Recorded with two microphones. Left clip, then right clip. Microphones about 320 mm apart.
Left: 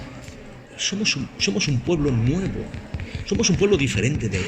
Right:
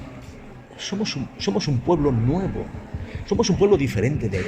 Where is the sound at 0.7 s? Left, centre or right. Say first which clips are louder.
Left 5 dB; right.